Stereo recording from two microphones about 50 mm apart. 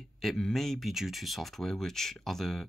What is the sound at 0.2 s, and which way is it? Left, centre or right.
Speech, centre.